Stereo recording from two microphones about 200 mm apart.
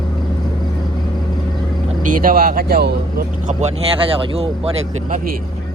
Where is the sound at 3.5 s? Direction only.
30° right (ahead or behind).